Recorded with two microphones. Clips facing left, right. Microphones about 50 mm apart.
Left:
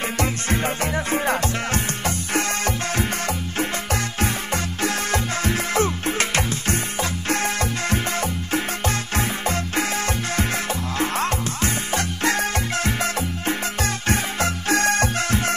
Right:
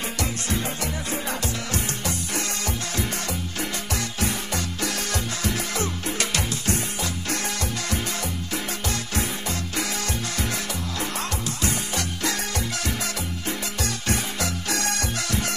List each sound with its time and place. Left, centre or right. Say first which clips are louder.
0.2 s music: left 5 dB; left